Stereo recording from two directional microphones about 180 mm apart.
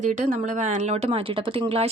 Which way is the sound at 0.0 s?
40° right (ahead or behind).